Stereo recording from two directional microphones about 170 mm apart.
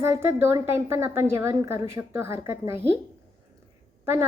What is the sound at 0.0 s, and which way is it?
A woman's voice, 15° right (ahead or behind).